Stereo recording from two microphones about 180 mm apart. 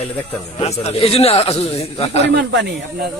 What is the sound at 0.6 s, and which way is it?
Speech, 35° left (ahead or behind).